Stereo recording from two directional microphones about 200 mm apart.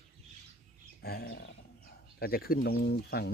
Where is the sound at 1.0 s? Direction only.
55° left (ahead or behind).